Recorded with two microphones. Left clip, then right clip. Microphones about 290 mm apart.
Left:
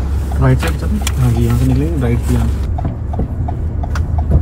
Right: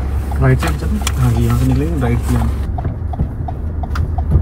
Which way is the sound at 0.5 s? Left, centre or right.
Centre.